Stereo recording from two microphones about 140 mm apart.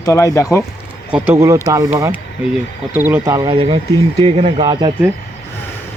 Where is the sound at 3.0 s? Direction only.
15° right (ahead or behind).